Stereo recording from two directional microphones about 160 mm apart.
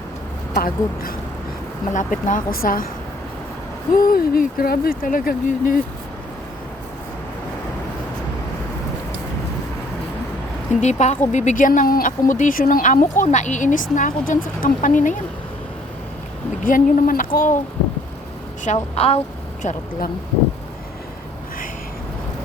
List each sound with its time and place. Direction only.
0.5 s speech: 65° left (ahead or behind)
1.9 s speech: 55° left (ahead or behind)
3.9 s speech: 65° left (ahead or behind)
10.8 s speech: 45° left (ahead or behind)
16.6 s speech: 60° left (ahead or behind)
18.6 s a woman's voice: 45° left (ahead or behind)